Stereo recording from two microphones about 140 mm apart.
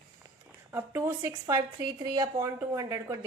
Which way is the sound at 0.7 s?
20° right (ahead or behind).